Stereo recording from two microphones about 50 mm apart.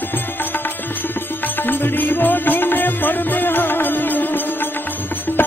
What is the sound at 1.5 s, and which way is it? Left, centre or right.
Music, left.